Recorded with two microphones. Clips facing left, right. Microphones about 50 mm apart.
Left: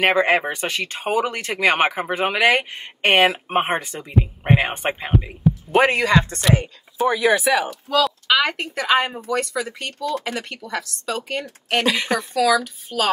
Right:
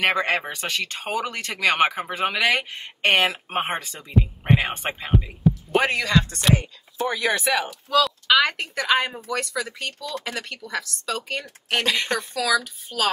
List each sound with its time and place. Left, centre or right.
0.0 s speech: centre
7.0 s a woman's voice: centre
9.9 s speech: centre
10.3 s a woman's voice: centre